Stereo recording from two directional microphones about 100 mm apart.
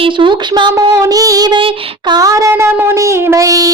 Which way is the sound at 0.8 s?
40° right (ahead or behind).